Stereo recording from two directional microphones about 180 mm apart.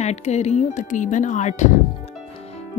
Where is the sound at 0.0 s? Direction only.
40° left (ahead or behind).